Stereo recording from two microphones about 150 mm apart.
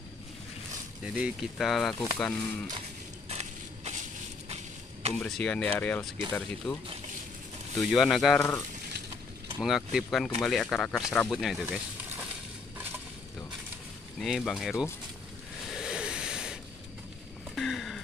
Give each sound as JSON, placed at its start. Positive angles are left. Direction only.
{"t": 1.0, "sound": "speech", "side_deg": -5}
{"t": 3.3, "sound": "crushing", "side_deg": -45}
{"t": 5.2, "sound": "speech", "side_deg": 5}
{"t": 7.9, "sound": "speech", "side_deg": 0}
{"t": 8.4, "sound": "speech", "side_deg": 15}
{"t": 9.6, "sound": "speech", "side_deg": 0}
{"t": 14.2, "sound": "speech", "side_deg": 0}
{"t": 15.7, "sound": "a sound", "side_deg": -5}
{"t": 17.6, "sound": "a sound", "side_deg": 0}